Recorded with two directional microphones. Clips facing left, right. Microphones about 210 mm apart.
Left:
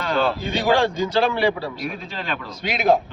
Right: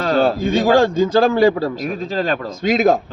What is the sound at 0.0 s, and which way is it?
A man's voice, 45° right (ahead or behind).